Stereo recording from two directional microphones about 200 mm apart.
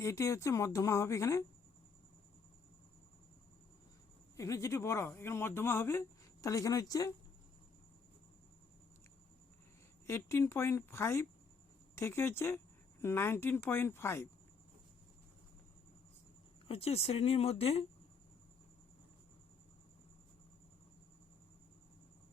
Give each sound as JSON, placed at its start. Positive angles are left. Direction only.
{"t": 0.0, "sound": "speech", "side_deg": 15}
{"t": 4.4, "sound": "speech", "side_deg": 15}
{"t": 10.1, "sound": "speech", "side_deg": 15}
{"t": 16.6, "sound": "speech", "side_deg": 30}